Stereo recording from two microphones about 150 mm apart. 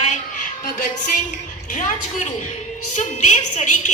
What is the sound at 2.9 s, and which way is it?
A woman's voice, 55° left (ahead or behind).